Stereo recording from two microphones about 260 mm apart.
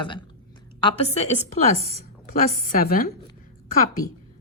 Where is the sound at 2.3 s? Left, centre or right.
Left.